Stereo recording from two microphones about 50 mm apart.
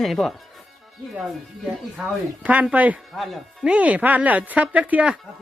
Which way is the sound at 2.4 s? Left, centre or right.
Right.